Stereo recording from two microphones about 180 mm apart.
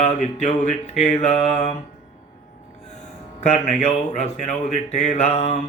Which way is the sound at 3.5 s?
35° left (ahead or behind).